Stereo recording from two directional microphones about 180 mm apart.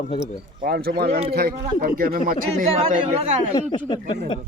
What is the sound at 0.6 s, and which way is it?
Speech, 60° right (ahead or behind).